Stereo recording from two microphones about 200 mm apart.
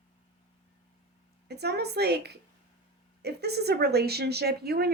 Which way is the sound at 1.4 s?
55° right (ahead or behind).